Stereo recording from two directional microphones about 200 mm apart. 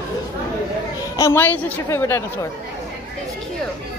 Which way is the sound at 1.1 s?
15° left (ahead or behind).